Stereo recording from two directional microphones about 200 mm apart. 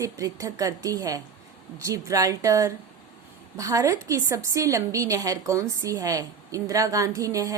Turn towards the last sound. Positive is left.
turn(degrees=-15)  # may be behind; listen again after turning